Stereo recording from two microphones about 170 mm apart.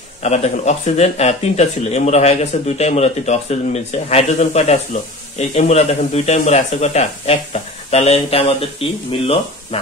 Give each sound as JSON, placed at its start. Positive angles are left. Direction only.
{"t": 0.2, "sound": "speech", "side_deg": 40}